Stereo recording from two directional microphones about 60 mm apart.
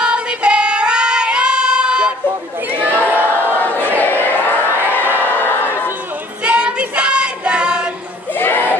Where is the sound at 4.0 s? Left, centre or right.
Left.